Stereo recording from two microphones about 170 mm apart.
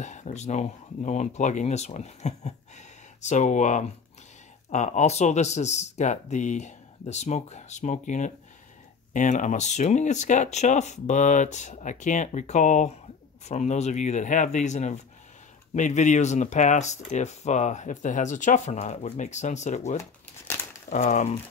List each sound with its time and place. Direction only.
0.0 s speech: 45° left (ahead or behind)